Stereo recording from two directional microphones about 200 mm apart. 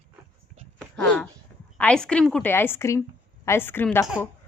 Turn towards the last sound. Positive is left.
turn(degrees=10)  # may be behind; listen again after turning